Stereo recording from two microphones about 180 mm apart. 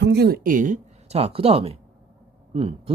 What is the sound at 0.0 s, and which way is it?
Speech, 65° right (ahead or behind).